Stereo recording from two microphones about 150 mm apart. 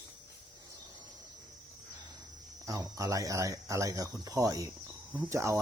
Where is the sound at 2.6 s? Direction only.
20° right (ahead or behind).